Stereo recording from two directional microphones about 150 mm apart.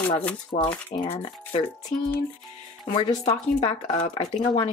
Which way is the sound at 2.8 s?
35° left (ahead or behind).